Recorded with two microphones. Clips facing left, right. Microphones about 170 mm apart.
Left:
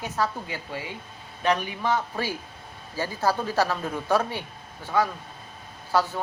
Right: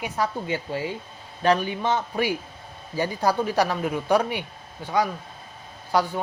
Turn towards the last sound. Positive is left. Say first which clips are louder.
# right 1 dB
turn(degrees=-15)  # may be behind; listen again after turning